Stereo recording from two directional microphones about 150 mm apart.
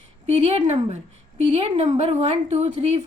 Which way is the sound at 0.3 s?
40° right (ahead or behind).